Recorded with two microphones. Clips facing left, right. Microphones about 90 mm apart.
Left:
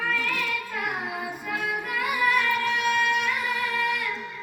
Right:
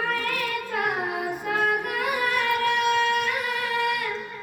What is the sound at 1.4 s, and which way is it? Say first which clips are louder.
Music: right 6 dB; 50° right (ahead or behind).